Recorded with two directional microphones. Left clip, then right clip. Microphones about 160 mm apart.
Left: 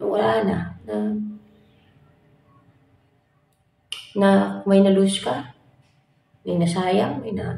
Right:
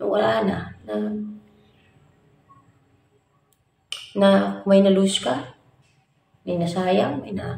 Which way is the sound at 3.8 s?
10° right (ahead or behind).